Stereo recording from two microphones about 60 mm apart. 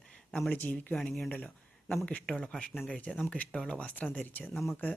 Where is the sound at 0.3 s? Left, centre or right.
Centre.